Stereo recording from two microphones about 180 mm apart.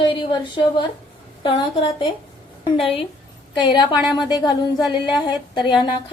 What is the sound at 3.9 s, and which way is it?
Speech, 10° right (ahead or behind).